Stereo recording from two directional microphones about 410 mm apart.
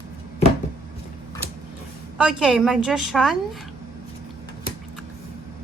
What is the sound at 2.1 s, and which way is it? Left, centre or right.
A woman's voice, centre.